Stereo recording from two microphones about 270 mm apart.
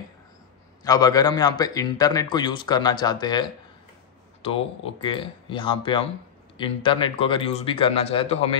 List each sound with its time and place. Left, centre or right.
0.8 s a man's voice: centre